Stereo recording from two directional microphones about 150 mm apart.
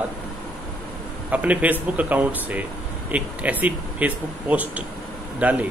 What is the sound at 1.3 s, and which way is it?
Speech, 10° right (ahead or behind).